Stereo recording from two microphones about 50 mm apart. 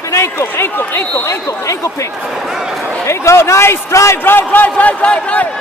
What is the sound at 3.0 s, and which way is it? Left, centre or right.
Speech, left.